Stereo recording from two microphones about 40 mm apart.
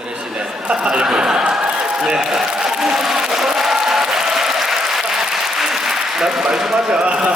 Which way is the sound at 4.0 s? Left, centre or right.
Centre.